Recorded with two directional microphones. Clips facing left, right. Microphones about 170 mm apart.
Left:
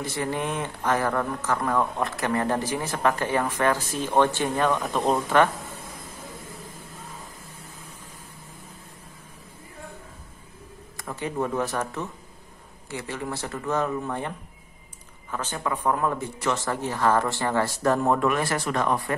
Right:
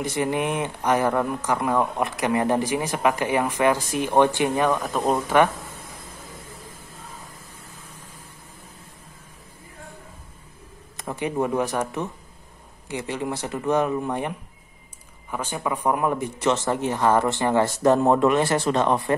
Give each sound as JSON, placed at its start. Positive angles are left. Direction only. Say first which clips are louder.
{"t": 0.0, "sound": "speech", "louder": "right 4 dB", "side_deg": -15}
{"t": 4.8, "sound": "speech", "louder": "right 1 dB", "side_deg": 0}
{"t": 11.0, "sound": "speech", "louder": "right 3 dB", "side_deg": -20}
{"t": 15.3, "sound": "speech", "louder": "right 2 dB", "side_deg": -10}